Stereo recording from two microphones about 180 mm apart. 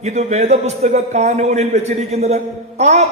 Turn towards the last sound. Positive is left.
turn(degrees=-40)  # may be behind; listen again after turning